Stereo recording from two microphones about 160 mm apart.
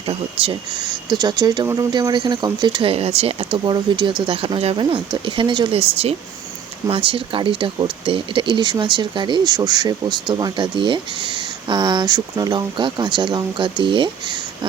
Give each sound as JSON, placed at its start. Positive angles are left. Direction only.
{"t": 0.1, "sound": "speech", "side_deg": -30}